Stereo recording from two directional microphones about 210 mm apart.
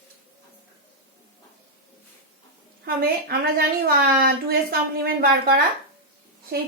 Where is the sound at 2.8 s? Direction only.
45° right (ahead or behind).